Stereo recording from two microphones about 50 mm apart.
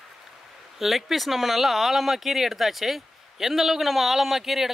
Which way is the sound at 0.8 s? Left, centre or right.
Centre.